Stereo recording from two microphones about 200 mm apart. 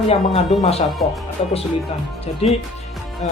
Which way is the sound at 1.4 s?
30° left (ahead or behind).